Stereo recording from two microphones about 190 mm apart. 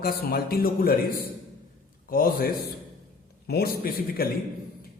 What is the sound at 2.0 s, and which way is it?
Speech, 50° left (ahead or behind).